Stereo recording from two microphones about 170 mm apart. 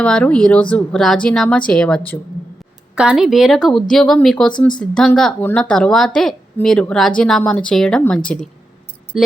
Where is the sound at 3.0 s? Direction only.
5° right (ahead or behind).